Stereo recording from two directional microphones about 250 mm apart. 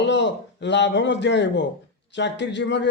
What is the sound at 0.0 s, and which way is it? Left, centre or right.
Speech, left.